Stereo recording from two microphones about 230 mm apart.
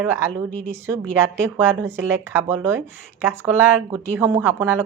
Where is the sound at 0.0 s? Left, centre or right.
Centre.